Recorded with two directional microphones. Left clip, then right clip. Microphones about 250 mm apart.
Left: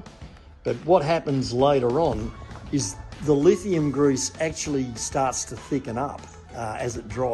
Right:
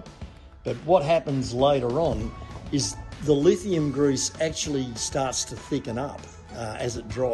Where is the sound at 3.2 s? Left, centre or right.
Left.